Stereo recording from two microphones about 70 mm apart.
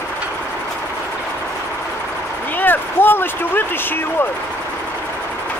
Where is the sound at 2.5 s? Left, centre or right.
Left.